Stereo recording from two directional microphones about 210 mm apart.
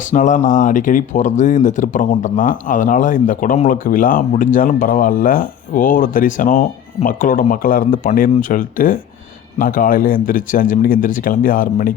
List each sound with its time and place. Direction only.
0.0 s speech: 35° left (ahead or behind)